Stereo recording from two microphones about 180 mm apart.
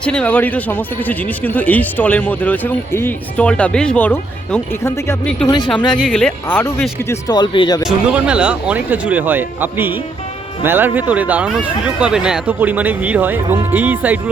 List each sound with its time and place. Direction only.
0.0 s speech: 5° left (ahead or behind)
5.5 s speech: 25° left (ahead or behind)
6.1 s speech: 5° left (ahead or behind)
7.1 s speech: 20° left (ahead or behind)
7.9 s speech: 5° right (ahead or behind)